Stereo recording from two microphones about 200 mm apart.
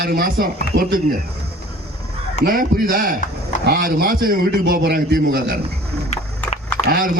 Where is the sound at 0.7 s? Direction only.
65° right (ahead or behind).